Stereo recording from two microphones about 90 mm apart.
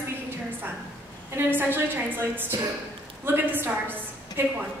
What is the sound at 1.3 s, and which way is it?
A woman's voice, 20° right (ahead or behind).